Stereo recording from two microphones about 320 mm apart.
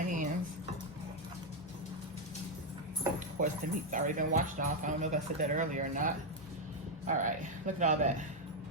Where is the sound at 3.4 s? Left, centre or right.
Right.